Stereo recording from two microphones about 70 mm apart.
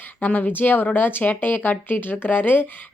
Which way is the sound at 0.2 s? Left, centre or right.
Left.